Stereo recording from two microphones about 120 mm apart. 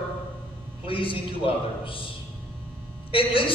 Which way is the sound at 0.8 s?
50° left (ahead or behind).